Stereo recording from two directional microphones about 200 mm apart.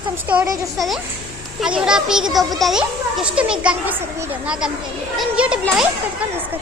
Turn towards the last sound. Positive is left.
turn(degrees=-5)  # may be behind; listen again after turning